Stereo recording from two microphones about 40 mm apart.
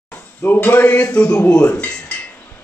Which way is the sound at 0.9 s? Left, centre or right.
Left.